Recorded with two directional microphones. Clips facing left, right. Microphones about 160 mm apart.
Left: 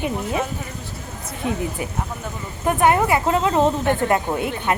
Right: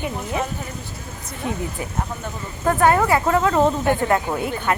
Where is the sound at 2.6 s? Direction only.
20° left (ahead or behind).